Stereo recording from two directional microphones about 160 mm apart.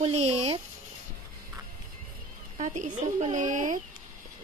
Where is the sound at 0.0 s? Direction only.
45° right (ahead or behind).